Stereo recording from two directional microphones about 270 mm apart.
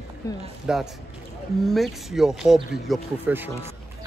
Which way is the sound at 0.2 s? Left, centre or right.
Centre.